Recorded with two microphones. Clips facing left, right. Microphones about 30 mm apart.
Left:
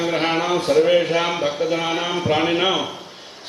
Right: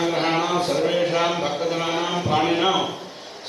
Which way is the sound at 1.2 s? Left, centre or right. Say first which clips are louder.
Left 1 dB; centre.